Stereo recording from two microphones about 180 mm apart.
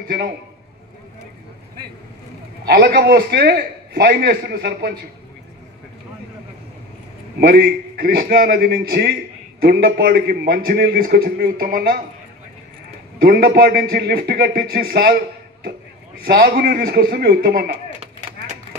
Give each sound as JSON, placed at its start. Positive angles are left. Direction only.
{"t": 0.0, "sound": "a man's voice", "side_deg": -55}
{"t": 2.6, "sound": "a man's voice", "side_deg": -55}
{"t": 7.3, "sound": "a man's voice", "side_deg": -55}
{"t": 13.2, "sound": "a man's voice", "side_deg": -55}